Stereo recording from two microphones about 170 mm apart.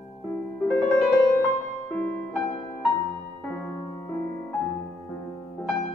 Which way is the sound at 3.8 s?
20° left (ahead or behind).